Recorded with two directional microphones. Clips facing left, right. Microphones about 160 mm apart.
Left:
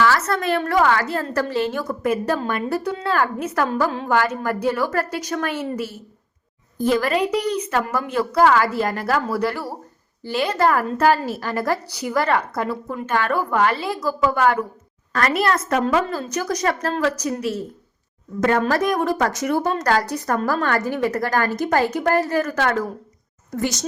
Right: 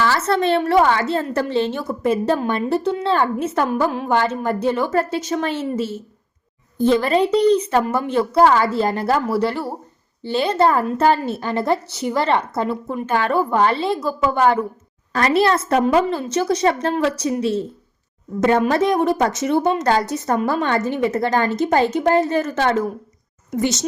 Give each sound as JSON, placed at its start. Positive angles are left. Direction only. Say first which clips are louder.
{"t": 0.0, "sound": "a woman's voice", "louder": "right 1 dB", "side_deg": -30}
{"t": 18.3, "sound": "a woman's voice", "louder": "right 3 dB", "side_deg": -25}